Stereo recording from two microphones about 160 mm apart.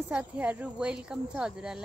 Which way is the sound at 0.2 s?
10° right (ahead or behind).